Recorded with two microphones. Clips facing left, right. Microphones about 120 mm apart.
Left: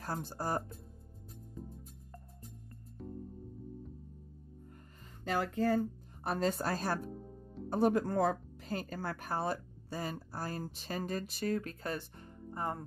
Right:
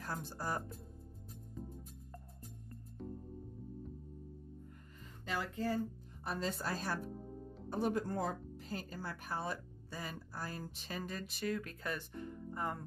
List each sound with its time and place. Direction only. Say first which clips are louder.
0.0 s speech: left 4 dB; 35° left (ahead or behind)
5.2 s speech: left 6 dB; 50° left (ahead or behind)
7.7 s speech: left 6 dB; 55° left (ahead or behind); by 12.8 s 30° left (ahead or behind)